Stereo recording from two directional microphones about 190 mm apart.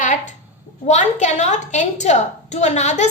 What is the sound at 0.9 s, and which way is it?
A woman's voice, 40° left (ahead or behind).